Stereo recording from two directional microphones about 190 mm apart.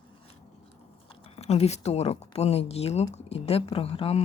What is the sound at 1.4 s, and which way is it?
Speech, 35° left (ahead or behind).